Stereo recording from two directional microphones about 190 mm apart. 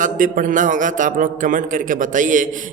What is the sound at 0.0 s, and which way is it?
A man's voice, 45° right (ahead or behind).